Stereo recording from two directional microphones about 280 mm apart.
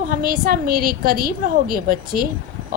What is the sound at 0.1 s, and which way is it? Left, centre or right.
A woman's voice, right.